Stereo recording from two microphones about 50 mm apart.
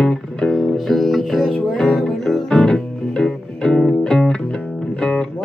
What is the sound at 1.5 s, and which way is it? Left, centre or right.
Music, centre.